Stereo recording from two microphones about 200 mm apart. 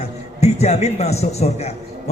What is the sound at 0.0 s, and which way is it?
A man's voice, 35° left (ahead or behind).